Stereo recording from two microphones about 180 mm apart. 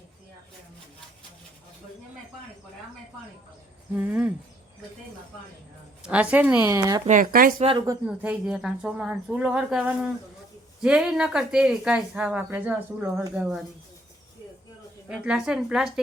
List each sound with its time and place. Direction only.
3.9 s a woman's voice: 10° right (ahead or behind)
6.0 s a woman's voice: 5° right (ahead or behind)
7.1 s speech: 50° right (ahead or behind)
8.0 s a woman's voice: 5° right (ahead or behind)
15.1 s a woman's voice: 5° right (ahead or behind)